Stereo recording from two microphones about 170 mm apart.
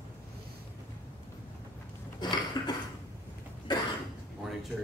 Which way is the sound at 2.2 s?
25° left (ahead or behind).